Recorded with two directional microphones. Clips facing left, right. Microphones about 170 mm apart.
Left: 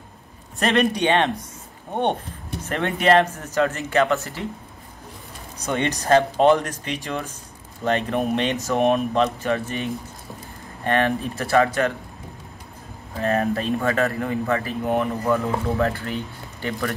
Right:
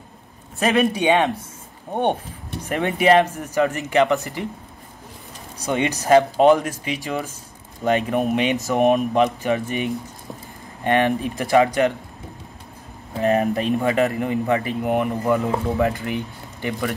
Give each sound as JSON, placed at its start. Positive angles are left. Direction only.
{"t": 0.6, "sound": "speech", "side_deg": -10}
{"t": 2.6, "sound": "speech", "side_deg": -10}
{"t": 5.7, "sound": "speech", "side_deg": -10}
{"t": 13.2, "sound": "speech", "side_deg": -15}